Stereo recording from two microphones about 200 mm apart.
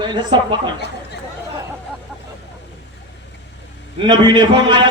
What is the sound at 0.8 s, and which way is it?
Speech, 55° left (ahead or behind).